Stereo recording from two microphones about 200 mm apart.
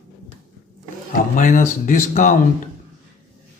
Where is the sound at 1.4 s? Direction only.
40° left (ahead or behind).